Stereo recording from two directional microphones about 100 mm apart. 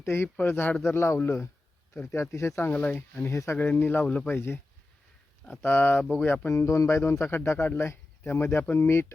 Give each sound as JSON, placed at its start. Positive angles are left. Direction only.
{"t": 0.0, "sound": "speech", "side_deg": 20}
{"t": 2.6, "sound": "speech", "side_deg": 15}
{"t": 4.4, "sound": "speech", "side_deg": 25}
{"t": 5.6, "sound": "speech", "side_deg": 20}